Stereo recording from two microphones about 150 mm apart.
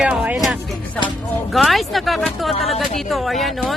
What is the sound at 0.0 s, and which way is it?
Music, 5° right (ahead or behind).